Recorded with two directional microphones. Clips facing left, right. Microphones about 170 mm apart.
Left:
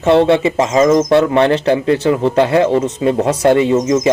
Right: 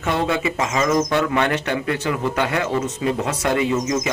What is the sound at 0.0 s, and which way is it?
A man's voice, 30° left (ahead or behind).